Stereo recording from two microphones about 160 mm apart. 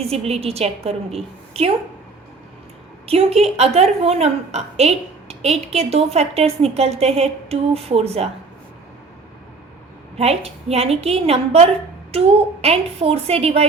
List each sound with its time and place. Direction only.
0.0 s a woman's voice: 40° right (ahead or behind)
3.1 s a woman's voice: 40° right (ahead or behind)
10.2 s a woman's voice: 40° right (ahead or behind)